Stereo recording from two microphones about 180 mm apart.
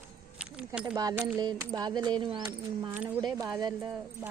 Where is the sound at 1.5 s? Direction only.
20° right (ahead or behind).